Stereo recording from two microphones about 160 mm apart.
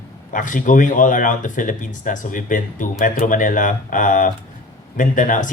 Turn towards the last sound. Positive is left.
turn(degrees=55)  # may be behind; listen again after turning